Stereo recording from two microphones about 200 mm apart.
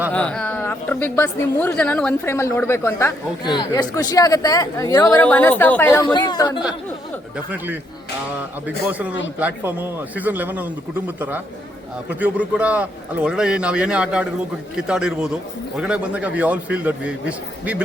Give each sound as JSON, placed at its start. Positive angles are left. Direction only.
{"t": 0.1, "sound": "a woman's voice", "side_deg": 5}
{"t": 5.1, "sound": "a woman's voice", "side_deg": 10}
{"t": 6.1, "sound": "speech", "side_deg": 20}
{"t": 8.6, "sound": "a man's voice", "side_deg": -5}